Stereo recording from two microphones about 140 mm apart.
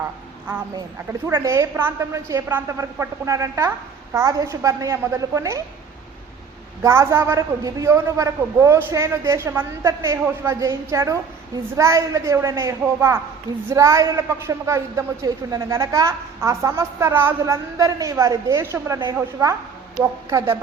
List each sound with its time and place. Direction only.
1.3 s a woman's voice: 20° right (ahead or behind)
6.8 s a woman's voice: 20° right (ahead or behind)
20.3 s a woman's voice: 15° right (ahead or behind)